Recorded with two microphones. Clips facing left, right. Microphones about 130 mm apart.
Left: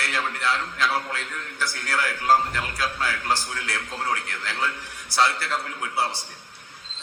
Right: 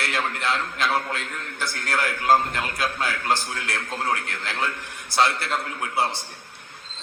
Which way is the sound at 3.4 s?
55° right (ahead or behind).